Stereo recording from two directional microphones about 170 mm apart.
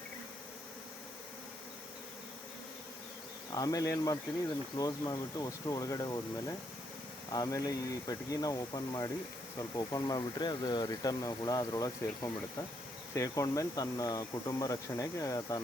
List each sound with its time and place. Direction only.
3.5 s speech: 20° left (ahead or behind)
7.3 s speech: 20° left (ahead or behind)